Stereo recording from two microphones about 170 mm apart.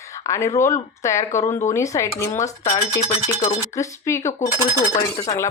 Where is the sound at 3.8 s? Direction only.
15° left (ahead or behind).